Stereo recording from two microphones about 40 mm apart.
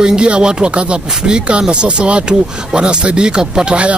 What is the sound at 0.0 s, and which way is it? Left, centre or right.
Speech, right.